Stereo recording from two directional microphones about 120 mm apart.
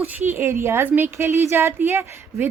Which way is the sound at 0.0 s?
15° right (ahead or behind).